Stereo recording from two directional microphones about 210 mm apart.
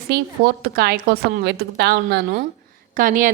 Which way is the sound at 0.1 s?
45° right (ahead or behind).